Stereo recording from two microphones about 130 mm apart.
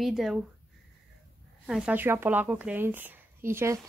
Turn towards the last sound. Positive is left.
turn(degrees=-20)  # may be behind; listen again after turning